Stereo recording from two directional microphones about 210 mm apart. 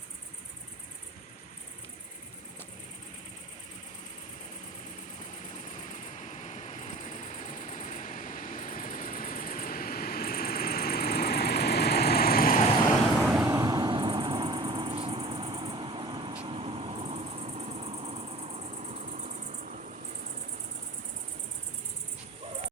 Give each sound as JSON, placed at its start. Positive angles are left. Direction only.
{"t": 5.3, "sound": "vehicle", "side_deg": 35}
{"t": 13.1, "sound": "vehicle", "side_deg": -5}